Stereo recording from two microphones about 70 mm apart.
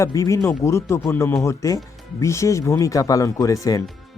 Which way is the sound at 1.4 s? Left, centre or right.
Left.